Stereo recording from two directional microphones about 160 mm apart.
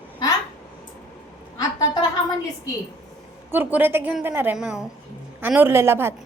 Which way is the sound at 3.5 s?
10° right (ahead or behind).